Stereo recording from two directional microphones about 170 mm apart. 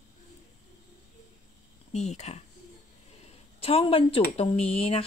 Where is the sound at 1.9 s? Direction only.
40° left (ahead or behind).